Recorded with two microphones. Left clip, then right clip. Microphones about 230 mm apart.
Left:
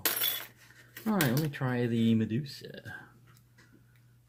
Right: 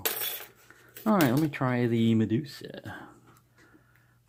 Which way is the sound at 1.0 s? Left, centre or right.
Right.